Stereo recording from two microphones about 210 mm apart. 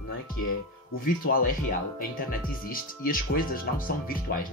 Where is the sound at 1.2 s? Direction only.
45° left (ahead or behind).